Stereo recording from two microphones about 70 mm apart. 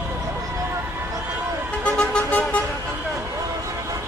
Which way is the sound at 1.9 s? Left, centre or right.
Left.